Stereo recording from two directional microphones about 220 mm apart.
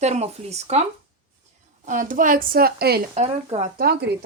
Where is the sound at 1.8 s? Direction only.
35° right (ahead or behind).